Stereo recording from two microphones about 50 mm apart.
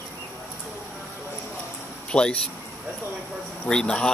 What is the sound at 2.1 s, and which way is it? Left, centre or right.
Speech, left.